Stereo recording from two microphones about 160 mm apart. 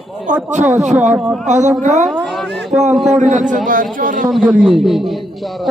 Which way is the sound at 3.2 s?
50° right (ahead or behind).